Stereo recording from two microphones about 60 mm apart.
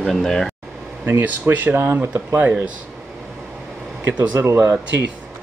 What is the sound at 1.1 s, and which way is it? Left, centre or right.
Speech, right.